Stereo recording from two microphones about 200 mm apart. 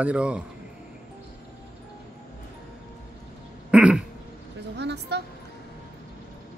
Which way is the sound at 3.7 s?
5° right (ahead or behind).